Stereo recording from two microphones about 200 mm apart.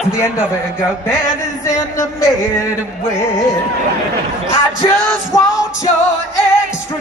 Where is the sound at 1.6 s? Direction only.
15° left (ahead or behind).